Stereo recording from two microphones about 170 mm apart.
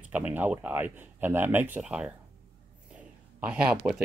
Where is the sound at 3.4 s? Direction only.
5° right (ahead or behind).